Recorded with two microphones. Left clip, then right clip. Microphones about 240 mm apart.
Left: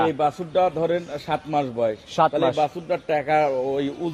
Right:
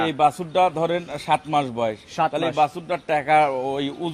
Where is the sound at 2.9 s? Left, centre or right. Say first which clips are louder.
Right 1 dB; right.